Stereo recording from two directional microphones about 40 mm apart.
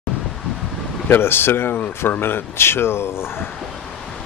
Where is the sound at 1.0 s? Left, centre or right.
Left.